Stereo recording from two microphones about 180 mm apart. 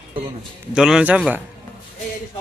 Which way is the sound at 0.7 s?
5° right (ahead or behind).